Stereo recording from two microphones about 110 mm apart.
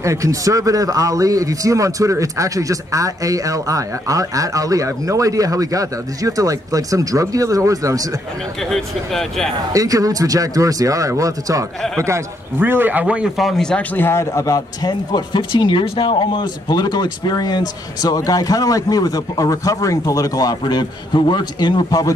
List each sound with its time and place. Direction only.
0.0 s speech: 30° right (ahead or behind)
8.6 s speech: 5° left (ahead or behind)
9.7 s speech: 30° right (ahead or behind)
12.5 s speech: 20° right (ahead or behind)
13.0 s speech: 5° right (ahead or behind)
13.9 s speech: 20° left (ahead or behind); by 22.0 s 40° left (ahead or behind)